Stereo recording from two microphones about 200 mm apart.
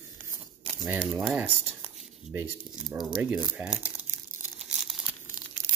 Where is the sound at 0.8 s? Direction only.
5° right (ahead or behind).